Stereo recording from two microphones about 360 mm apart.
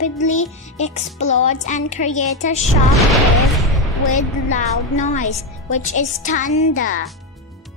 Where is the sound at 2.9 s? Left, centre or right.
Centre.